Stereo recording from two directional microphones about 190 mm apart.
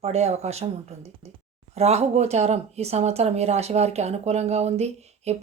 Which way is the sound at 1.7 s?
35° right (ahead or behind).